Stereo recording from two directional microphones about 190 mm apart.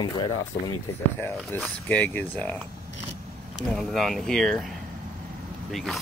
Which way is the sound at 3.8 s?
Centre (ahead or behind).